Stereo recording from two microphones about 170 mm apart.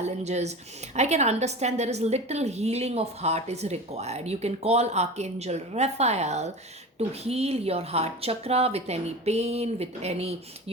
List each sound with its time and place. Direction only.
0.0 s a woman's voice: 40° right (ahead or behind)